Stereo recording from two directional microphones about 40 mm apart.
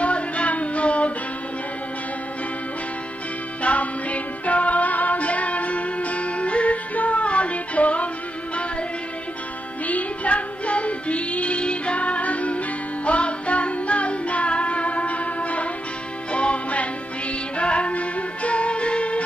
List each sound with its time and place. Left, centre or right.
0.0 s music: left
3.6 s music: left
9.8 s music: left